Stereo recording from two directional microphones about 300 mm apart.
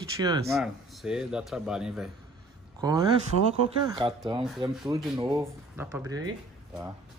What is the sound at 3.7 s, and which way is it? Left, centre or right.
Speech, centre.